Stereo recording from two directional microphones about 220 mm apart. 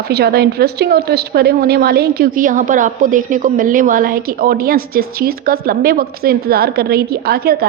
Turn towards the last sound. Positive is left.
turn(degrees=-45)  # may be behind; listen again after turning